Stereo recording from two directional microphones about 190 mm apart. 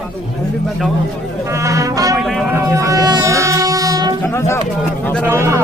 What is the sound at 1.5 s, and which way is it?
Speech, 15° right (ahead or behind).